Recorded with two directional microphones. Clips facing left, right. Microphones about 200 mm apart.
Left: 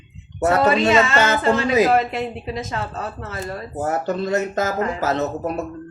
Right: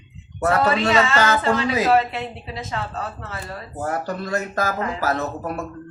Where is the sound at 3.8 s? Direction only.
25° left (ahead or behind).